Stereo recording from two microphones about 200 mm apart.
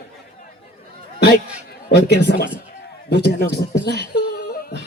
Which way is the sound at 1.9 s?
55° left (ahead or behind).